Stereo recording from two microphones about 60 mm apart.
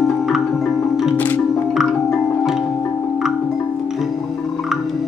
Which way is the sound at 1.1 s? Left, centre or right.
Left.